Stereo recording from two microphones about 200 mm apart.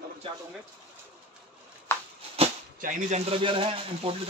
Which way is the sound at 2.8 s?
30° right (ahead or behind).